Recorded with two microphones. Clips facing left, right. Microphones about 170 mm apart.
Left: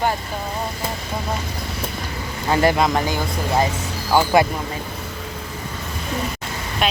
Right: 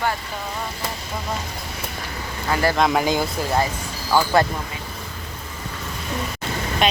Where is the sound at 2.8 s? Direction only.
5° right (ahead or behind).